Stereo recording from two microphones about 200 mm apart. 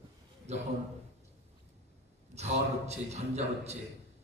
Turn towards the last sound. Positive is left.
turn(degrees=-35)  # may be behind; listen again after turning